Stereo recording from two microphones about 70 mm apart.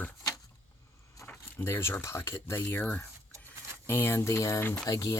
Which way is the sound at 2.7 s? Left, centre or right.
Left.